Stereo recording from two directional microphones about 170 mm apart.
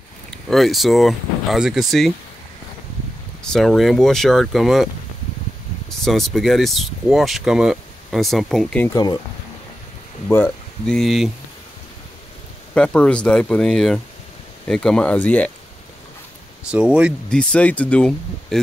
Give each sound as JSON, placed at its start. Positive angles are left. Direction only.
{"t": 0.3, "sound": "speech", "side_deg": 0}
{"t": 3.4, "sound": "speech", "side_deg": 0}
{"t": 5.9, "sound": "speech", "side_deg": 0}
{"t": 8.9, "sound": "speech", "side_deg": 25}
{"t": 10.2, "sound": "speech", "side_deg": 10}
{"t": 12.7, "sound": "speech", "side_deg": 5}
{"t": 16.7, "sound": "speech", "side_deg": -5}
{"t": 17.3, "sound": "speech", "side_deg": 5}